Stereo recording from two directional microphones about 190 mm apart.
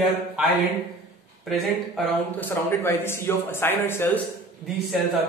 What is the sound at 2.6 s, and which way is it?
A man's voice, 10° left (ahead or behind).